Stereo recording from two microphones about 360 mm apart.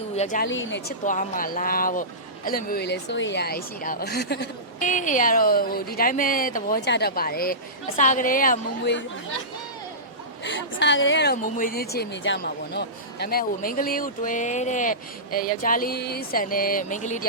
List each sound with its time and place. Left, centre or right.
0.2 s speech: left
0.4 s speech: left
10.4 s speech: left